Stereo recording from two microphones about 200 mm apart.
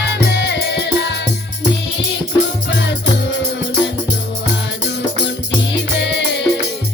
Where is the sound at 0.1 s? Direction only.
60° left (ahead or behind).